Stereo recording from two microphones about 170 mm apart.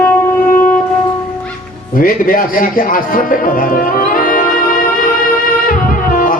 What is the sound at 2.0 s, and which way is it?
Speech, 55° left (ahead or behind).